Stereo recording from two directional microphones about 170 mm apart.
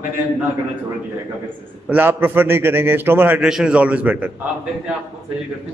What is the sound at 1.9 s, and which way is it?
A man's voice, 10° right (ahead or behind).